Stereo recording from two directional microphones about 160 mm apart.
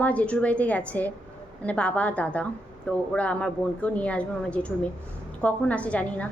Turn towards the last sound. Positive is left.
turn(degrees=10)  # may be behind; listen again after turning